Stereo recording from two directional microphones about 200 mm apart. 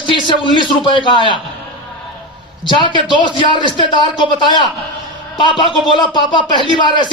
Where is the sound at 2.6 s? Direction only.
25° left (ahead or behind).